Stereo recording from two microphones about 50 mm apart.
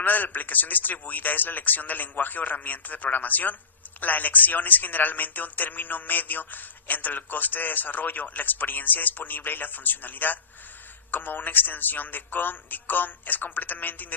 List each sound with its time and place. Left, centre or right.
0.0 s speech: left